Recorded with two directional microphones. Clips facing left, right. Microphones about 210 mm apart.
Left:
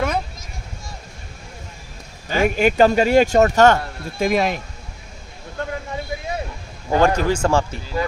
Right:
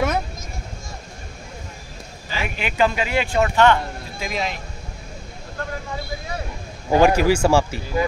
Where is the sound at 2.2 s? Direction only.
45° left (ahead or behind).